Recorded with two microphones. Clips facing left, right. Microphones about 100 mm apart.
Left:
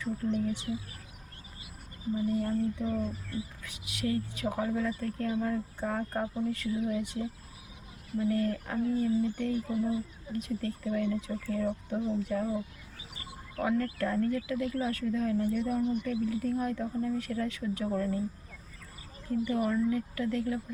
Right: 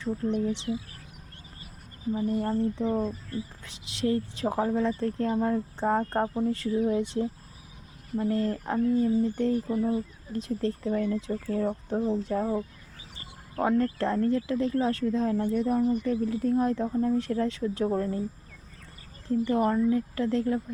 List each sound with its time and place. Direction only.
0.4 s speech: 25° right (ahead or behind)
2.1 s speech: 40° right (ahead or behind)
8.3 s speech: 30° right (ahead or behind)
19.5 s speech: 40° right (ahead or behind)